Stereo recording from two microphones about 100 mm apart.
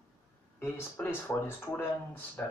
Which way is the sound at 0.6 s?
20° left (ahead or behind).